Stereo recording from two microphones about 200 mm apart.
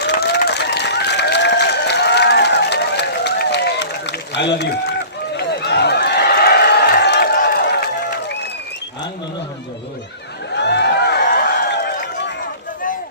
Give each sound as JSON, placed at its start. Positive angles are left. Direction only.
{"t": 0.0, "sound": "applause", "side_deg": 55}
{"t": 5.4, "sound": "a sound", "side_deg": 55}
{"t": 10.5, "sound": "run", "side_deg": 60}